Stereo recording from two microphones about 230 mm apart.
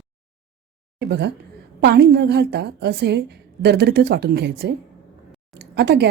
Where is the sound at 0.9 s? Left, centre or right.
Right.